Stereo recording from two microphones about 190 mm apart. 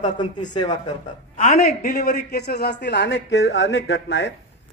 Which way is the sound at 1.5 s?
55° left (ahead or behind).